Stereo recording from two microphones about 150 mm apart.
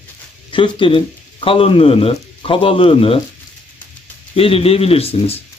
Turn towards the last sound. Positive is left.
turn(degrees=40)  # may be behind; listen again after turning